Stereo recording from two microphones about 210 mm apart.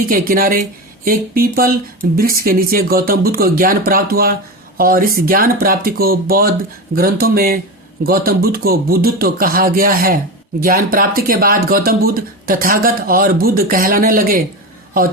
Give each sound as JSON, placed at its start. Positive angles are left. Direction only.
{"t": 0.0, "sound": "speech", "side_deg": -45}